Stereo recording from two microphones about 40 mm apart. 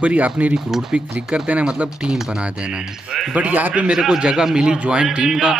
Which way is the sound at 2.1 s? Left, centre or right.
Centre.